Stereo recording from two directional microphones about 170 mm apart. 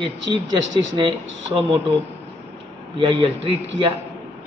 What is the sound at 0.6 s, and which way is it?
Speech, 90° right.